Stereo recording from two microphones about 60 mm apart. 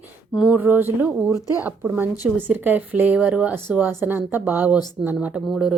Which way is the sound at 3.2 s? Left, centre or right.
Centre.